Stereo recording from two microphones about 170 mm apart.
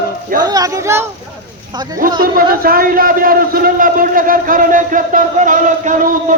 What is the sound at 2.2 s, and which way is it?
A man's voice, 60° right (ahead or behind).